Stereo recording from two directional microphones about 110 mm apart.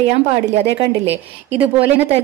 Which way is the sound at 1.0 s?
15° right (ahead or behind).